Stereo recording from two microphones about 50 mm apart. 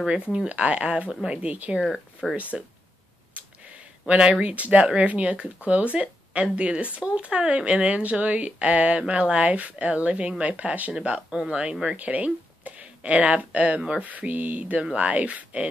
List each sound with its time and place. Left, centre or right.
0.5 s speech: right
2.2 s speech: centre
4.1 s speech: right
12.0 s speech: right
14.0 s speech: right